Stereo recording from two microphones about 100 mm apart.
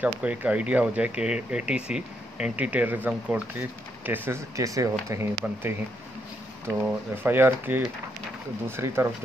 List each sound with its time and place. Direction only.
0.0 s speech: 15° right (ahead or behind)
4.6 s speech: 35° right (ahead or behind)
7.2 s speech: 20° right (ahead or behind)